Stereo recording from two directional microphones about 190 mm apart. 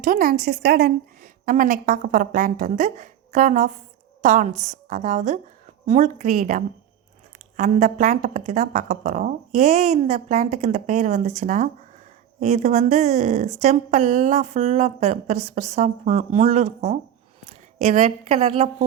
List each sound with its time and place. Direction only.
0.0 s a woman's voice: 50° right (ahead or behind); by 18.7 s 35° right (ahead or behind)